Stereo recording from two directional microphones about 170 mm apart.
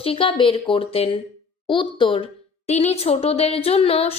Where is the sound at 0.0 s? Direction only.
35° left (ahead or behind).